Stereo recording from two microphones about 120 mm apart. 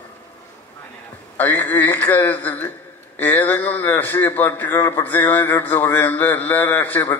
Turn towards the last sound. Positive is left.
turn(degrees=15)  # may be behind; listen again after turning